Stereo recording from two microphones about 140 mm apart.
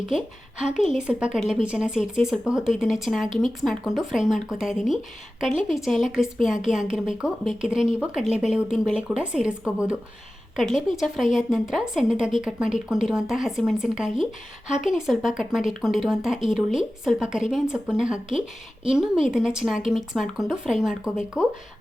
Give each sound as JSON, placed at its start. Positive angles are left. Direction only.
{"t": 0.6, "sound": "a woman's voice", "side_deg": 55}
{"t": 0.9, "sound": "a woman's voice", "side_deg": -5}